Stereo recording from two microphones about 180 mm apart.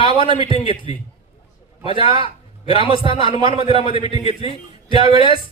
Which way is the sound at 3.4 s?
25° right (ahead or behind).